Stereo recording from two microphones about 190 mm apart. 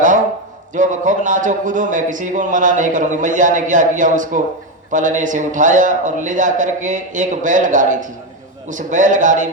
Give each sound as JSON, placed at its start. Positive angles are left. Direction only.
{"t": 0.7, "sound": "a man's voice", "side_deg": -40}